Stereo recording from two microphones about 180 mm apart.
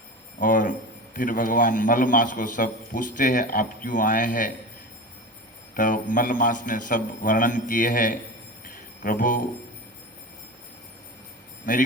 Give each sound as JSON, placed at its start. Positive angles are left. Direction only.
{"t": 0.3, "sound": "a man's voice", "side_deg": 50}
{"t": 5.7, "sound": "a man's voice", "side_deg": 50}
{"t": 8.6, "sound": "music", "side_deg": 50}